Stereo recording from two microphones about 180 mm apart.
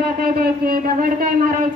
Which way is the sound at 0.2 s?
55° right (ahead or behind).